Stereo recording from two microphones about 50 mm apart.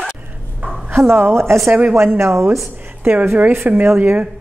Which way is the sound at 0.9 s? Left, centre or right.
Right.